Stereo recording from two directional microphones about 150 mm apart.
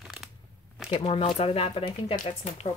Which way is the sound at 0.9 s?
40° left (ahead or behind).